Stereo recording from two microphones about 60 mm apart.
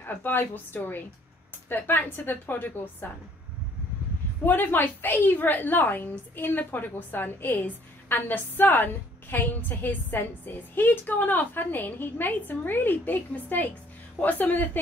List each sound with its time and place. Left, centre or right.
0.0 s a woman's voice: left
1.7 s a woman's voice: left
4.5 s a woman's voice: left